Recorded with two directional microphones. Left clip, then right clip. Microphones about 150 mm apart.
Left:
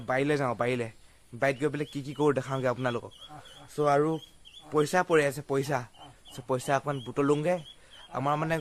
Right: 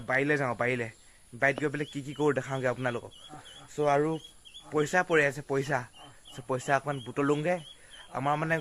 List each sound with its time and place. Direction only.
0.0 s a man's voice: 25° left (ahead or behind)